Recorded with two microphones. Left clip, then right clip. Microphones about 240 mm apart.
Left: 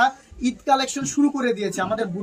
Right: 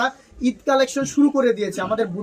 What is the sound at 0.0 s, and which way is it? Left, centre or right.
Speech, centre.